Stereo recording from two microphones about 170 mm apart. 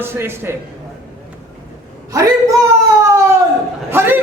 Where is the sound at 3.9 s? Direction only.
15° right (ahead or behind).